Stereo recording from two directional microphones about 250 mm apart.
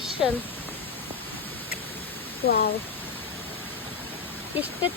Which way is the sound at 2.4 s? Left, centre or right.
Left.